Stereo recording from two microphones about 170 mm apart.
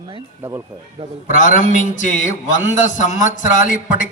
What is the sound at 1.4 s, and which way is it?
A man's voice, 50° left (ahead or behind).